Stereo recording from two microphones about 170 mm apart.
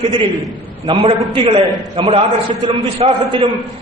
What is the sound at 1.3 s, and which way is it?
A man's voice, 30° right (ahead or behind).